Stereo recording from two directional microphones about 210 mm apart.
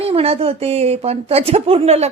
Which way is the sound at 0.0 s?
30° right (ahead or behind).